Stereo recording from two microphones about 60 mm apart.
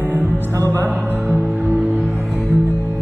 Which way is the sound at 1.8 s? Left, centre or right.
Right.